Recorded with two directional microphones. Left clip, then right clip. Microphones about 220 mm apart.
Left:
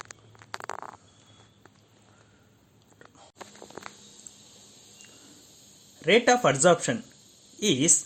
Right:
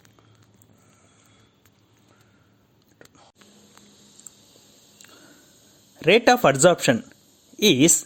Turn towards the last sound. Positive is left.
turn(degrees=-35)  # may be behind; listen again after turning